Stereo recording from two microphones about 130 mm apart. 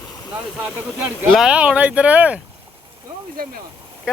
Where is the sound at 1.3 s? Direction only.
5° right (ahead or behind).